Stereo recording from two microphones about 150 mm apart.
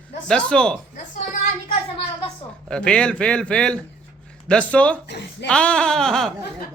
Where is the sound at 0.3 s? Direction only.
5° left (ahead or behind).